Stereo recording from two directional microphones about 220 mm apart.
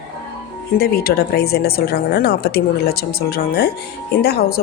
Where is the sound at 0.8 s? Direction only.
45° left (ahead or behind).